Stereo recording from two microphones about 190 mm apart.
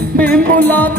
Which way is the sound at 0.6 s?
10° left (ahead or behind).